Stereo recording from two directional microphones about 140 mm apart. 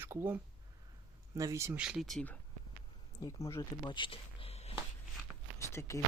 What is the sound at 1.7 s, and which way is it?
Speech, 5° right (ahead or behind).